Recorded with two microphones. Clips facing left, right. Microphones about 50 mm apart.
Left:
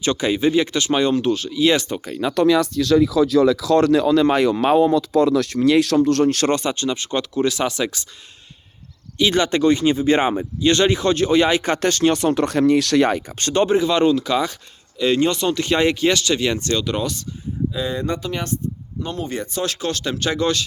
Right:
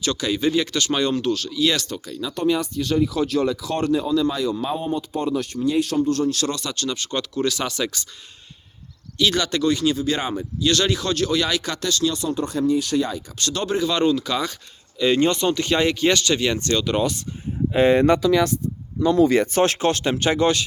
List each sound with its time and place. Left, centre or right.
0.0 s speech: centre
2.3 s speech: left
6.2 s speech: left
6.6 s speech: centre
9.1 s speech: centre; by 12.3 s left
12.3 s speech: left
13.2 s speech: left
13.7 s speech: centre
16.9 s speech: centre
17.7 s speech: right
19.3 s speech: right
19.6 s speech: right; by 20.7 s centre